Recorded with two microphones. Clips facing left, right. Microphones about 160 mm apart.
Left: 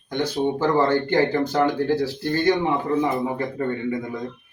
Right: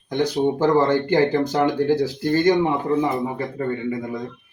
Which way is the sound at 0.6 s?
15° right (ahead or behind).